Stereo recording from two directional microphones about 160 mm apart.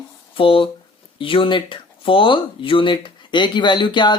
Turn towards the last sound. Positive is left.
turn(degrees=30)  # may be behind; listen again after turning